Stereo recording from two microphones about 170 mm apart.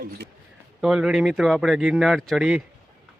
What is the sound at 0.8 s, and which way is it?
Speech, 5° right (ahead or behind).